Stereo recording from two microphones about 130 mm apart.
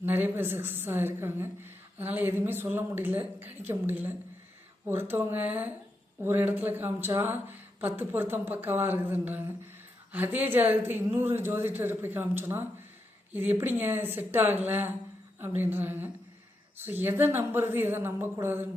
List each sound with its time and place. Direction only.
0.0 s speech: 15° right (ahead or behind)